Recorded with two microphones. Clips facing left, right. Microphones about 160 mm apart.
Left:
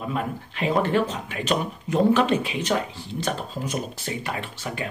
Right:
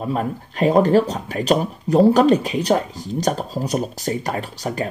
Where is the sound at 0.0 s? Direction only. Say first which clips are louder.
Right 5 dB; 40° right (ahead or behind).